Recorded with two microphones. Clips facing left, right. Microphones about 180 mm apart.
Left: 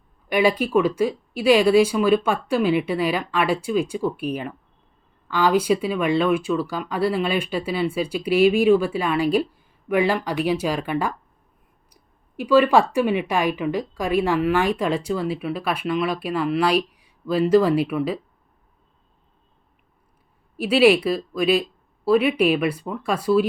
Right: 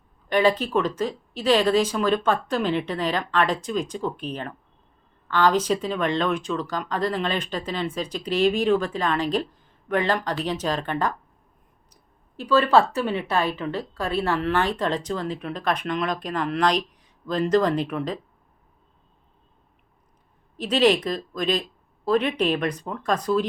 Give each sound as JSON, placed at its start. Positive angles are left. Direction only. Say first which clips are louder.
{"t": 0.3, "sound": "a woman's voice", "louder": "left 1 dB", "side_deg": 10}
{"t": 12.4, "sound": "a woman's voice", "louder": "left 2 dB", "side_deg": 10}
{"t": 20.6, "sound": "a woman's voice", "louder": "left 4 dB", "side_deg": 10}